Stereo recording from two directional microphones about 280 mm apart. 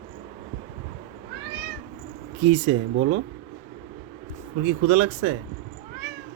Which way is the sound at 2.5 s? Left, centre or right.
Right.